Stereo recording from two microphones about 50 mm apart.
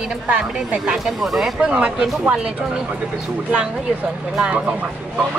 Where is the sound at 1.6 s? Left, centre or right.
Right.